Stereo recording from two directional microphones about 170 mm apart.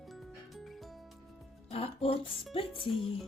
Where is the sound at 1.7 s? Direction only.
35° left (ahead or behind).